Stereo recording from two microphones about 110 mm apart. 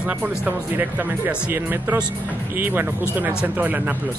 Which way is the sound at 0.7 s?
20° right (ahead or behind).